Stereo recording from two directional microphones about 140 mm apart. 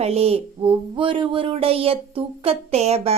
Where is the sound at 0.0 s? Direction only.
45° right (ahead or behind).